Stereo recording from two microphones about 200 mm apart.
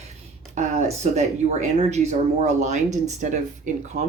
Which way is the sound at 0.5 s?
35° right (ahead or behind).